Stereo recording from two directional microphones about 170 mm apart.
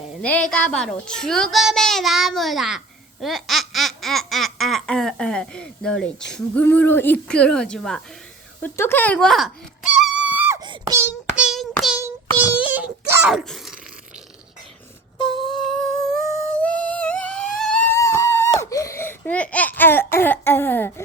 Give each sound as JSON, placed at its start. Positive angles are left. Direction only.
{"t": 0.2, "sound": "a woman's voice", "side_deg": 5}
{"t": 8.6, "sound": "wail", "side_deg": 15}
{"t": 10.6, "sound": "a sound", "side_deg": -25}
{"t": 11.3, "sound": "child singing", "side_deg": 0}
{"t": 12.4, "sound": "wail", "side_deg": -10}
{"t": 13.3, "sound": "groan", "side_deg": 0}
{"t": 15.5, "sound": "humming", "side_deg": 5}